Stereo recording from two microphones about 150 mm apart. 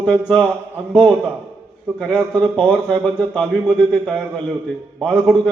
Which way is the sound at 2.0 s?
5° left (ahead or behind).